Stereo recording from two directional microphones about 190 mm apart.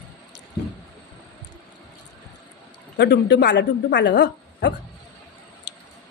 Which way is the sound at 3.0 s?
60° left (ahead or behind).